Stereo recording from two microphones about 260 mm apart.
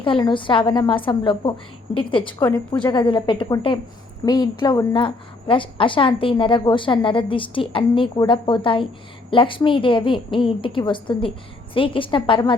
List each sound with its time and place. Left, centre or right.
0.0 s a woman's voice: centre
2.4 s a woman's voice: centre
3.0 s a woman's voice: centre